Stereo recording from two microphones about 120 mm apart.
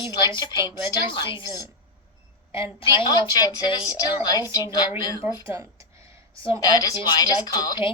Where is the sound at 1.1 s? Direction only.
40° left (ahead or behind).